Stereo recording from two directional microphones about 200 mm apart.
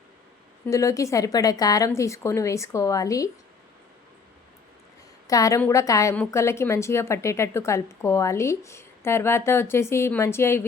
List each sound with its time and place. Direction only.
0.7 s a woman's voice: 15° left (ahead or behind)
5.3 s a woman's voice: 15° left (ahead or behind)